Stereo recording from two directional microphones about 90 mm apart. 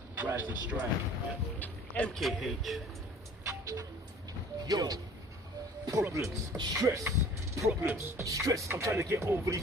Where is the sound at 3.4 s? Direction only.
35° right (ahead or behind).